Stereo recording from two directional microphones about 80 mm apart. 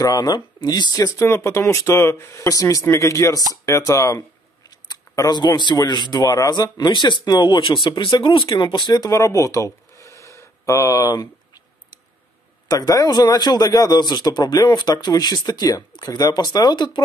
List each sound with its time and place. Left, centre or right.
0.0 s speech: left
0.6 s a man's voice: left
1.2 s speech: left
2.4 s speech: left
4.6 s a sound: left
5.9 s a man's voice: left
8.7 s speech: left
12.6 s a man's voice: left